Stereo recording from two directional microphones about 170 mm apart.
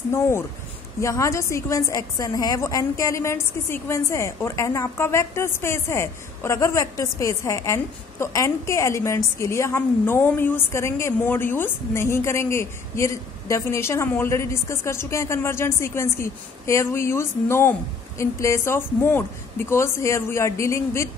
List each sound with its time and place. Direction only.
1.0 s a woman's voice: 15° left (ahead or behind)